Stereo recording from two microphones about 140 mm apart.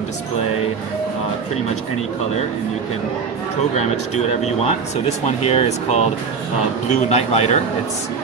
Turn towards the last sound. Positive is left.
turn(degrees=50)  # may be behind; listen again after turning